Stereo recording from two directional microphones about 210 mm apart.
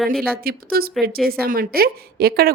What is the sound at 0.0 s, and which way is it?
Speech, centre (ahead or behind).